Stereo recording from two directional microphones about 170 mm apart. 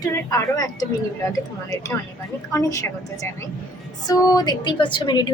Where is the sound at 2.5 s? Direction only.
20° left (ahead or behind).